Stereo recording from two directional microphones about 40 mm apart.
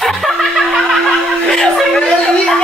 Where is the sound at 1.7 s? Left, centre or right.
Centre.